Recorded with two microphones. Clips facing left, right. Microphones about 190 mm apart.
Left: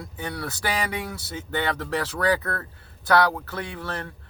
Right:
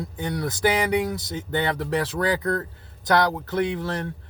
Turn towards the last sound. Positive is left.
turn(degrees=-15)  # may be behind; listen again after turning